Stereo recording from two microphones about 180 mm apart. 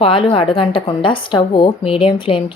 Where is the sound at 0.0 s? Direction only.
30° left (ahead or behind).